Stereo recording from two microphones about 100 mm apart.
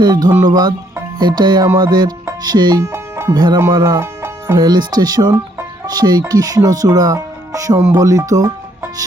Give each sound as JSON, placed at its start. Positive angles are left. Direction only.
{"t": 0.0, "sound": "speech", "side_deg": -45}
{"t": 2.8, "sound": "music", "side_deg": -25}
{"t": 3.3, "sound": "speech", "side_deg": -40}
{"t": 4.0, "sound": "music", "side_deg": -30}
{"t": 4.6, "sound": "speech", "side_deg": -45}